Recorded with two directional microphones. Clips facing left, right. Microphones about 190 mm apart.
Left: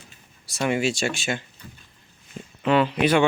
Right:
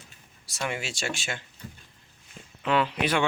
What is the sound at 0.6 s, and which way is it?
Speech, 15° left (ahead or behind).